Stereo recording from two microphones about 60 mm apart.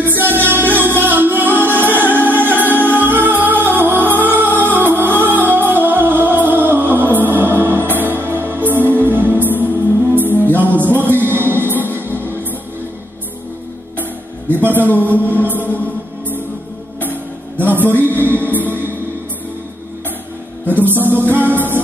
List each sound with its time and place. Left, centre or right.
0.0 s music: right
14.6 s a sound: right
17.0 s music: right
20.6 s music: right